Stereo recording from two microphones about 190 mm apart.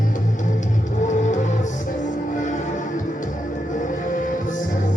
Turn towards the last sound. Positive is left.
turn(degrees=45)  # may be behind; listen again after turning